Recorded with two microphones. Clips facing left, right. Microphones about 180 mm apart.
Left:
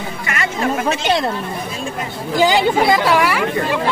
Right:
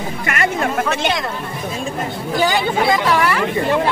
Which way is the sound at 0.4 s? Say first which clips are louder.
Right 1 dB; 50° right (ahead or behind).